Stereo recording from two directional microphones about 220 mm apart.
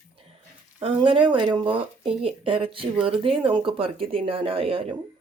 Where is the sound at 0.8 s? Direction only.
25° right (ahead or behind).